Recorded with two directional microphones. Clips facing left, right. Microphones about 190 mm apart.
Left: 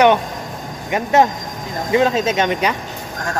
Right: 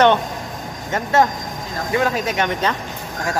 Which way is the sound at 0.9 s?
20° left (ahead or behind).